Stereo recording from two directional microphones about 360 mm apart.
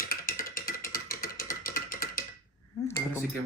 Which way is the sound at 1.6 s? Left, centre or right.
Left.